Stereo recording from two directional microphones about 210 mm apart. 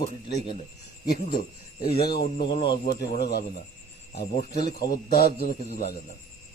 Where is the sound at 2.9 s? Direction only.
50° left (ahead or behind).